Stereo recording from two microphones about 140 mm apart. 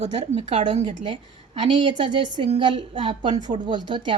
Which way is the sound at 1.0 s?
35° right (ahead or behind).